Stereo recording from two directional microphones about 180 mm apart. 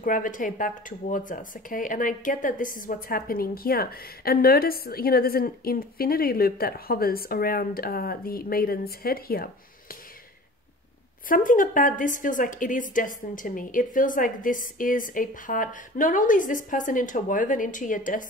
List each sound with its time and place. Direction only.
0.0 s speech: 50° left (ahead or behind)
11.2 s a woman's voice: 50° left (ahead or behind)